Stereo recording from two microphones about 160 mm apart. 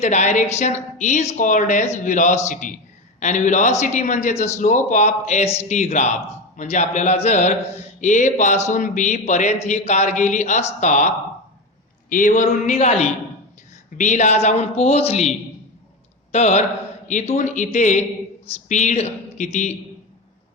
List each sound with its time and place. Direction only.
0.0 s a man's voice: 50° left (ahead or behind)